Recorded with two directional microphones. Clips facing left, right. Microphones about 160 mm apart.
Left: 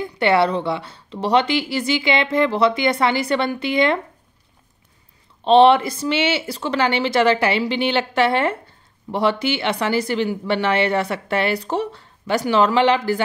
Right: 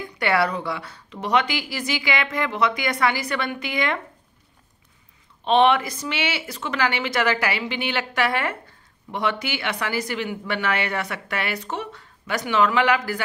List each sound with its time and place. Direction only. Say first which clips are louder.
0.0 s speech: left 5 dB; 25° left (ahead or behind)
5.4 s speech: left 6 dB; 30° left (ahead or behind)